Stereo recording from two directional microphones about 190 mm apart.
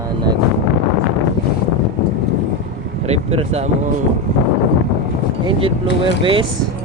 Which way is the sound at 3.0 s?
35° right (ahead or behind).